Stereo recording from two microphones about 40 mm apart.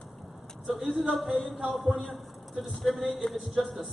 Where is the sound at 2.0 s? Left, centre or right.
Centre.